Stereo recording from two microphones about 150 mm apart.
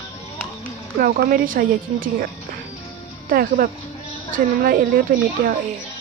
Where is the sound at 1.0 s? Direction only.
70° right (ahead or behind).